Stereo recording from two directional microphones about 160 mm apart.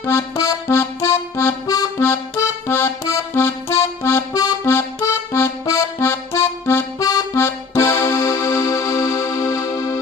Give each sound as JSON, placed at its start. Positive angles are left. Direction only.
{"t": 0.0, "sound": "accordion", "side_deg": 15}